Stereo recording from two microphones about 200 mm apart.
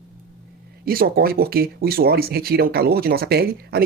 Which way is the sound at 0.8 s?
45° right (ahead or behind).